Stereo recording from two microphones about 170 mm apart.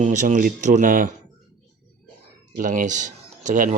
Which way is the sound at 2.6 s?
45° right (ahead or behind).